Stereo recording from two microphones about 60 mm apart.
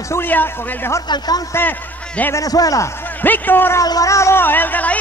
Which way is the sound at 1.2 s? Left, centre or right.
Left.